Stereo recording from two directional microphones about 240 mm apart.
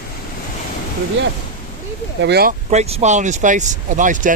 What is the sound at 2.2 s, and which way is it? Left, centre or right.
Speech, right.